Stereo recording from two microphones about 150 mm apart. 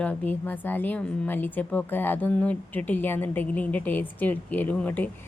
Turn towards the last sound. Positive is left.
turn(degrees=10)  # may be behind; listen again after turning